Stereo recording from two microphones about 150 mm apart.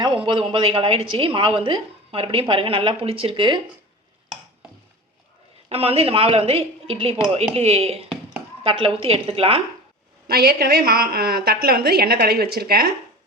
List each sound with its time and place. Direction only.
0.0 s a woman's voice: 30° right (ahead or behind)
5.6 s a woman's voice: 40° right (ahead or behind)
10.2 s a woman's voice: 90° right